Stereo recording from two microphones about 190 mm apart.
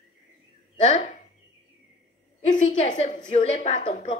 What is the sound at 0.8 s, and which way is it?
Speech, 35° left (ahead or behind).